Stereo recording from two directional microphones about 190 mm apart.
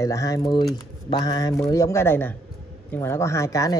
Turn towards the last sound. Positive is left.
turn(degrees=15)  # may be behind; listen again after turning